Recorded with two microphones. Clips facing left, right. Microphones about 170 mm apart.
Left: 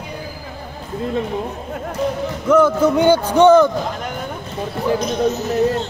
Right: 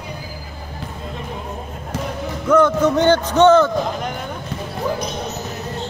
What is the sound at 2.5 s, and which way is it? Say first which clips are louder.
A man's voice: left 1 dB; 5° left (ahead or behind).